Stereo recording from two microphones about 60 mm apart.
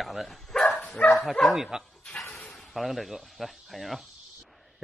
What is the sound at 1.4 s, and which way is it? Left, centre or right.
Speech, centre.